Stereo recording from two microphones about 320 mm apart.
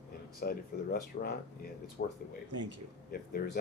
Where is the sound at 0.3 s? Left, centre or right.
Left.